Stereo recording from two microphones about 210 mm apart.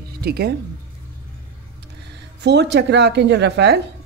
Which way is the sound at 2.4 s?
55° right (ahead or behind).